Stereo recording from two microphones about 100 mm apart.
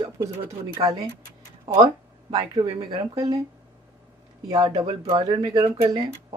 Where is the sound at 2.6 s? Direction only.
55° right (ahead or behind).